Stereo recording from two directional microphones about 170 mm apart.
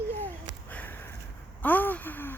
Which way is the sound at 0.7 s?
10° left (ahead or behind).